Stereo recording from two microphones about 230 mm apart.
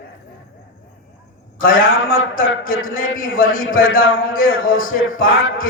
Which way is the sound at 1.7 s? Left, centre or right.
Left.